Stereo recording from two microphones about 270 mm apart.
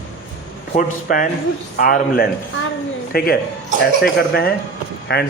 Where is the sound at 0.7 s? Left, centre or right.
Left.